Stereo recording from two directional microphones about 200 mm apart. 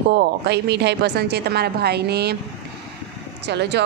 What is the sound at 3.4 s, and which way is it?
Speech, 60° right (ahead or behind).